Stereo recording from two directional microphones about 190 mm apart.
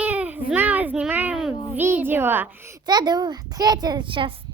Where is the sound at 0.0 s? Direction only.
10° right (ahead or behind).